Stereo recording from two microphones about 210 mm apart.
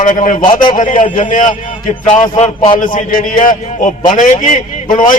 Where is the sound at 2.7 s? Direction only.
40° left (ahead or behind).